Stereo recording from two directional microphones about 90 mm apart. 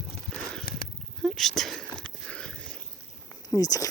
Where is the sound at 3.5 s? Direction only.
40° left (ahead or behind).